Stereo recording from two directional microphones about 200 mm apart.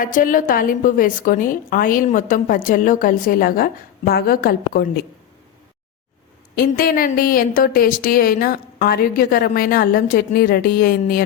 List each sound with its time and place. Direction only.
0.0 s a woman's voice: 40° left (ahead or behind)
6.6 s a woman's voice: 45° left (ahead or behind)